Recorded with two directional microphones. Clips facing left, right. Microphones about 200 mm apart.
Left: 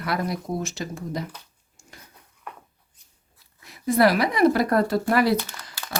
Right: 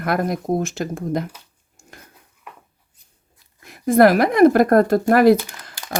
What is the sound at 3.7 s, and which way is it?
Speech, 50° right (ahead or behind).